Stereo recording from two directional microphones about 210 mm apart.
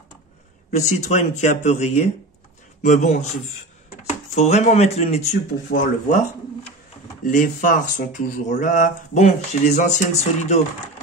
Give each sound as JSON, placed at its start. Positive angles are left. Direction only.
{"t": 0.7, "sound": "speech", "side_deg": 35}
{"t": 4.4, "sound": "speech", "side_deg": 35}
{"t": 7.2, "sound": "speech", "side_deg": 40}